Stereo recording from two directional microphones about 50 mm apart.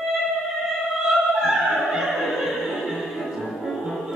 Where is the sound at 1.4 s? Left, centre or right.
Centre.